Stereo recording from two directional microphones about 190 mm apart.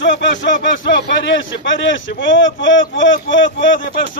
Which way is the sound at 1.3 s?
75° left (ahead or behind).